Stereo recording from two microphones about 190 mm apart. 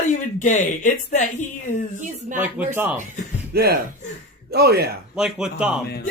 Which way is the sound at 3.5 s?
55° right (ahead or behind).